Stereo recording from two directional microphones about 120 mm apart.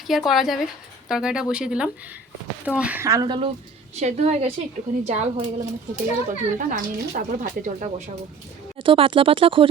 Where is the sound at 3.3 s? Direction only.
45° right (ahead or behind).